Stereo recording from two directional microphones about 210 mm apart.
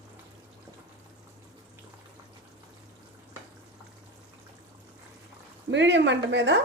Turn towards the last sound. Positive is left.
turn(degrees=-60)  # may be behind; listen again after turning